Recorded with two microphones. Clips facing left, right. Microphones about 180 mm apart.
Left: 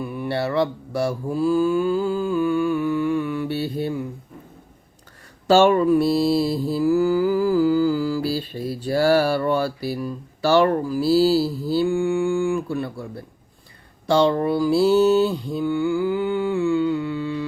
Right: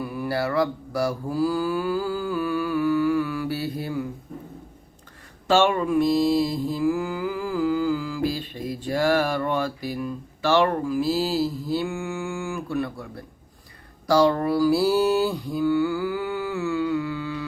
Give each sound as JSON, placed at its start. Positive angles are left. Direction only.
{"t": 0.0, "sound": "mantra", "side_deg": 25}
{"t": 5.5, "sound": "mantra", "side_deg": 35}
{"t": 12.7, "sound": "speech", "side_deg": 30}
{"t": 14.1, "sound": "mantra", "side_deg": 25}